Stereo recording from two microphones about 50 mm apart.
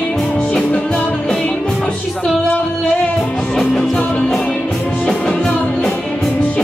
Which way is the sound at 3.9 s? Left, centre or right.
Left.